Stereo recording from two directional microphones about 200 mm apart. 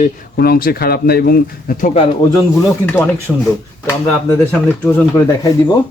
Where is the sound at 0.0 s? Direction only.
50° left (ahead or behind).